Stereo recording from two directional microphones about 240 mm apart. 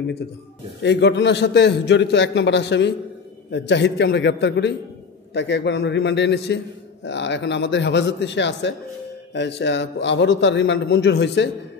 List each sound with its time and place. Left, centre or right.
0.8 s a man's voice: left